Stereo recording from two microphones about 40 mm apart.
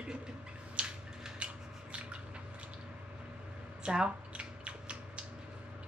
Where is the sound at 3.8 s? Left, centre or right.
Right.